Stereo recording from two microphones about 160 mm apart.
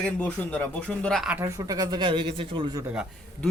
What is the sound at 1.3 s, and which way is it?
Speech, 15° right (ahead or behind).